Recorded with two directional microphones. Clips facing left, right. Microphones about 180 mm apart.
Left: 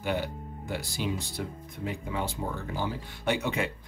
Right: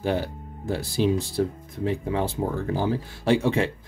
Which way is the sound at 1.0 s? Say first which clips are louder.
Right 12 dB; 30° right (ahead or behind).